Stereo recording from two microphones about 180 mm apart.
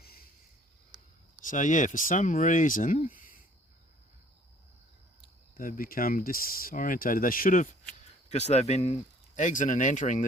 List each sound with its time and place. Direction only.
0.0 s a sound: 55° left (ahead or behind)
1.5 s speech: 45° left (ahead or behind)
5.5 s speech: 50° left (ahead or behind)